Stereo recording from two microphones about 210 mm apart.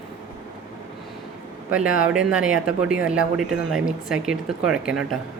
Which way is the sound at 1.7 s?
5° right (ahead or behind).